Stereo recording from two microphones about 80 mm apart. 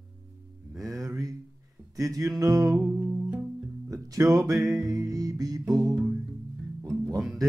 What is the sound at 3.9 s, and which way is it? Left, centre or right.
Speech, right.